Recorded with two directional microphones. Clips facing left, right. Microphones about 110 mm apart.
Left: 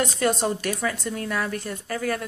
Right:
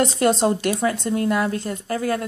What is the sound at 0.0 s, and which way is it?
A woman's voice, 25° right (ahead or behind).